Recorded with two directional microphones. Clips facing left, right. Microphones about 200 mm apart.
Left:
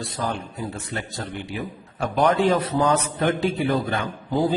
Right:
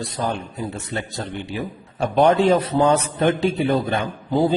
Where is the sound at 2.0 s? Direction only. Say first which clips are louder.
Right 4 dB; 25° right (ahead or behind).